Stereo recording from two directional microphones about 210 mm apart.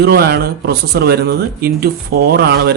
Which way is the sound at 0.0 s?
50° right (ahead or behind).